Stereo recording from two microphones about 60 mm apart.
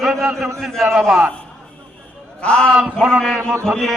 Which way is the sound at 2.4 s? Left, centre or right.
Centre.